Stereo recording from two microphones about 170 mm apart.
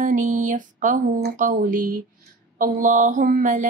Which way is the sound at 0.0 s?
50° right (ahead or behind).